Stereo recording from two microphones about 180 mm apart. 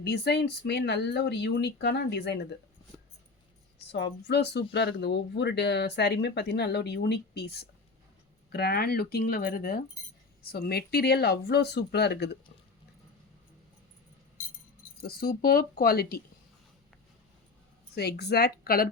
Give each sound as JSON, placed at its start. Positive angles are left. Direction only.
{"t": 0.0, "sound": "speech", "side_deg": 65}
{"t": 3.9, "sound": "speech", "side_deg": 70}
{"t": 15.0, "sound": "speech", "side_deg": 55}
{"t": 17.9, "sound": "speech", "side_deg": 65}